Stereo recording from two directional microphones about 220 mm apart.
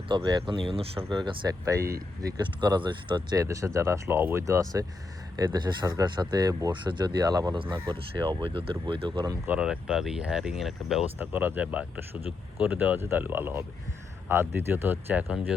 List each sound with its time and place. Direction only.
0.1 s speech: 20° right (ahead or behind)
9.6 s speech: 5° right (ahead or behind)